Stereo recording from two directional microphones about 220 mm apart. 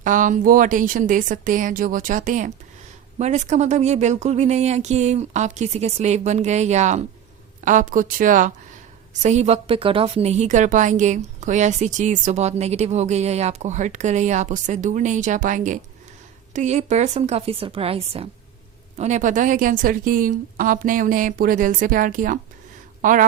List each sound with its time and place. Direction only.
0.0 s a woman's voice: 35° right (ahead or behind)